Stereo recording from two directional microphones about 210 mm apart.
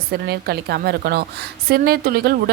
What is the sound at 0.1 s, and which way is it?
A woman's voice, 50° right (ahead or behind).